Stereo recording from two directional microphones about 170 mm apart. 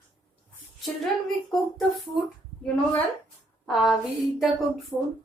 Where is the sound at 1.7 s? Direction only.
Centre (ahead or behind).